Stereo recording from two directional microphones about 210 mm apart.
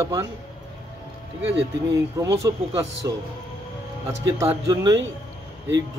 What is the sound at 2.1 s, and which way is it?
Speech, 15° right (ahead or behind).